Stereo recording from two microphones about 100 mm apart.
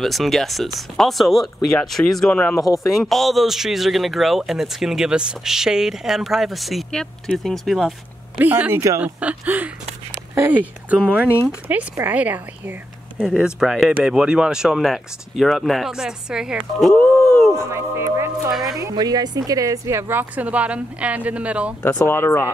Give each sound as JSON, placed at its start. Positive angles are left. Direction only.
{"t": 0.0, "sound": "a man's voice", "side_deg": 0}
{"t": 2.3, "sound": "speech", "side_deg": 15}
{"t": 2.6, "sound": "speech", "side_deg": 35}
{"t": 3.0, "sound": "a man's voice", "side_deg": 0}
{"t": 8.4, "sound": "a woman's voice", "side_deg": -20}
{"t": 9.0, "sound": "a woman's voice", "side_deg": -15}
{"t": 16.9, "sound": "a sound", "side_deg": 10}
{"t": 17.6, "sound": "a woman's voice", "side_deg": -25}
{"t": 18.5, "sound": "a man's voice", "side_deg": -5}
{"t": 18.8, "sound": "a woman's voice", "side_deg": -40}
{"t": 22.0, "sound": "speech", "side_deg": 25}